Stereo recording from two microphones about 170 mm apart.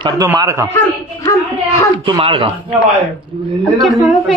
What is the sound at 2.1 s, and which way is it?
Speech, 30° right (ahead or behind).